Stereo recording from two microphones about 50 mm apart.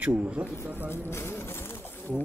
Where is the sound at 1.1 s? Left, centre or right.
Left.